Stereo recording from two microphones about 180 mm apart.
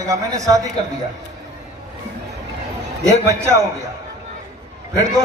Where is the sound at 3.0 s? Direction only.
15° right (ahead or behind).